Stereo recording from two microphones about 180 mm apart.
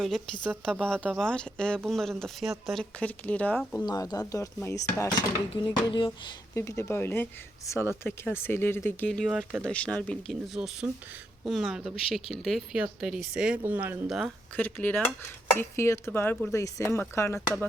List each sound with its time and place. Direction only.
0.0 s speech: centre (ahead or behind)
3.8 s speech: 20° left (ahead or behind)
6.1 s speech: 15° left (ahead or behind); by 14.3 s 5° right (ahead or behind)
14.5 s speech: 10° left (ahead or behind)